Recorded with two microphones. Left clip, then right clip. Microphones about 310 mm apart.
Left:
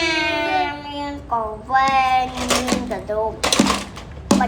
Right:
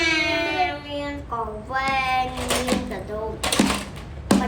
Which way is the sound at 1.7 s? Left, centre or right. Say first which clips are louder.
Left 7 dB; centre.